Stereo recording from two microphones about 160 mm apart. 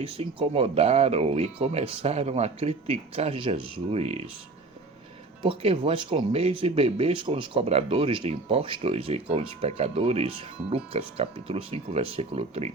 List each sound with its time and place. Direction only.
0.0 s speech: 35° right (ahead or behind)
5.4 s speech: 35° right (ahead or behind)